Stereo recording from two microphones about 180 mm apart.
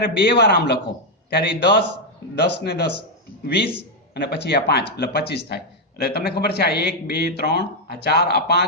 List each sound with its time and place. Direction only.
0.0 s a man's voice: 60° left (ahead or behind)